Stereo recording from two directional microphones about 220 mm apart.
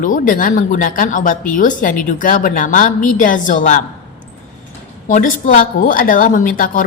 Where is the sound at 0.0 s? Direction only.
35° left (ahead or behind).